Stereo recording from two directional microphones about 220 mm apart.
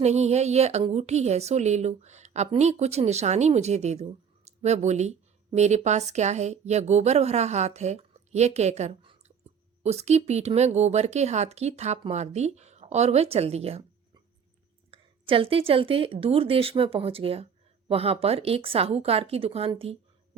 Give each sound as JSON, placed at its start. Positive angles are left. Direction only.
{"t": 0.0, "sound": "a woman's voice", "side_deg": -30}
{"t": 14.8, "sound": "a woman's voice", "side_deg": -25}